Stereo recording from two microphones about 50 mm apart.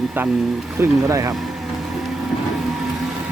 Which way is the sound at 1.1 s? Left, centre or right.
Right.